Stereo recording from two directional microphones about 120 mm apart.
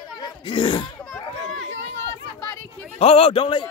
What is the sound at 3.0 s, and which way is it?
Speech, 50° left (ahead or behind).